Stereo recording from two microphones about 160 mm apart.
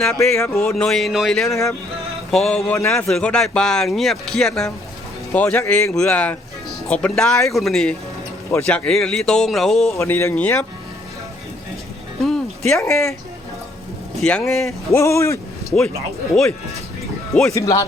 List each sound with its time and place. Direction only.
0.0 s speech: 5° left (ahead or behind)
10.0 s speech: 15° left (ahead or behind)
12.2 s music: 5° left (ahead or behind)
12.9 s speech: 5° left (ahead or behind)
14.2 s speech: 5° left (ahead or behind)
14.7 s speech: 15° left (ahead or behind)
17.5 s speech: 20° left (ahead or behind)